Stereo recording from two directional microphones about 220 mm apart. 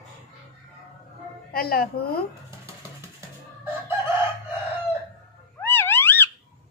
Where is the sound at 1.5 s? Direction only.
45° left (ahead or behind).